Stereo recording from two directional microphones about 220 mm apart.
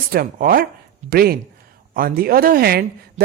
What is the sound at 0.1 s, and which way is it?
A man's voice, 40° right (ahead or behind).